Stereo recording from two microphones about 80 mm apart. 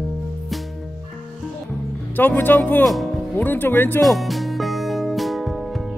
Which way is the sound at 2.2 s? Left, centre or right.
Left.